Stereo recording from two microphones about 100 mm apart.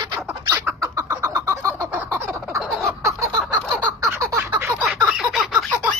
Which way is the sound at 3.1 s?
35° right (ahead or behind).